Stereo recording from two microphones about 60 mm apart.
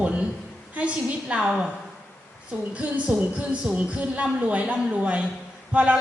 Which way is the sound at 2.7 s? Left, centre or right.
Right.